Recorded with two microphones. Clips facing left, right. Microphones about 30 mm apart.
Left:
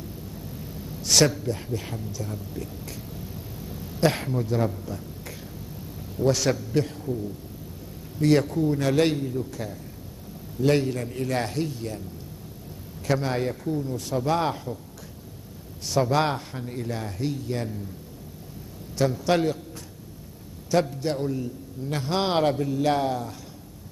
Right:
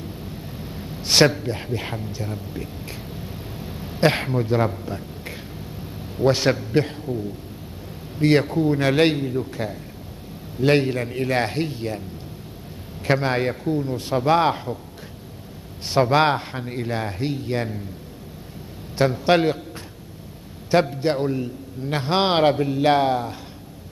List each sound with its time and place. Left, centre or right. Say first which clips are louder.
0.0 s a sound: right 4 dB; right
8.2 s a man's voice: right 3 dB; right
13.0 s a man's voice: right 5 dB; right
15.9 s a man's voice: right 5 dB; right
18.9 s a man's voice: right 5 dB; right
20.7 s a man's voice: right 5 dB; right